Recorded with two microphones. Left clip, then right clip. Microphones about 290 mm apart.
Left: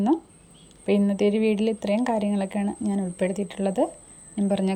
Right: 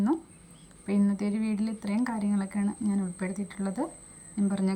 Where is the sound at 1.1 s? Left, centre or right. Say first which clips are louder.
Left 11 dB; centre.